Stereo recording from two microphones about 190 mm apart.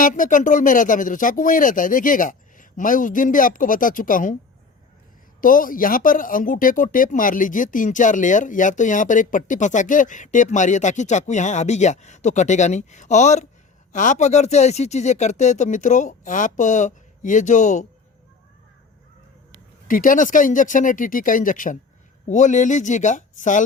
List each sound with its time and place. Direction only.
0.0 s speech: 45° left (ahead or behind)
5.4 s speech: 45° left (ahead or behind)
19.9 s speech: 45° left (ahead or behind)